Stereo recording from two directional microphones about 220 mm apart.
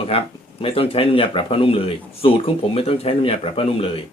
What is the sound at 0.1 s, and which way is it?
Speech, 25° left (ahead or behind).